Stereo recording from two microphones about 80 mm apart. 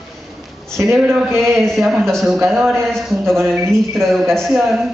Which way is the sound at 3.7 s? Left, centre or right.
Centre.